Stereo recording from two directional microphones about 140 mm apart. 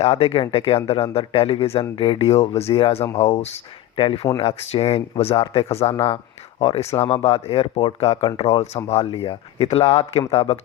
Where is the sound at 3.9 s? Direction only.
35° left (ahead or behind).